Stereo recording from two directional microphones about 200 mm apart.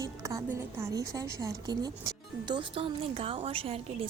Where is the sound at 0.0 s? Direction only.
15° right (ahead or behind).